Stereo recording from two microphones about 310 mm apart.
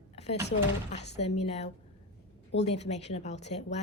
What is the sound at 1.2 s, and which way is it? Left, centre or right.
Speech, centre.